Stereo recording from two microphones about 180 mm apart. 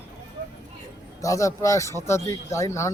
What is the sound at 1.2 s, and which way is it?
Speech, 20° left (ahead or behind).